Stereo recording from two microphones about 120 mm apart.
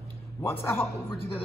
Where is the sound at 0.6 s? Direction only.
20° left (ahead or behind).